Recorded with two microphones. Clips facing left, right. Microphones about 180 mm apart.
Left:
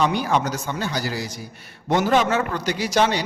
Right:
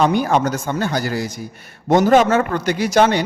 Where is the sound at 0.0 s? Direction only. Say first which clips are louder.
Right 5 dB; 50° right (ahead or behind).